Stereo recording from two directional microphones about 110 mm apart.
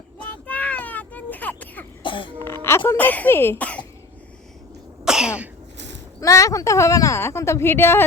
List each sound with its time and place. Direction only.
0.2 s a sound: 15° left (ahead or behind)
2.0 s throat clearing: 50° left (ahead or behind)
2.4 s speech: 20° left (ahead or behind)
5.0 s cough: 5° right (ahead or behind)
6.1 s speech: 30° left (ahead or behind)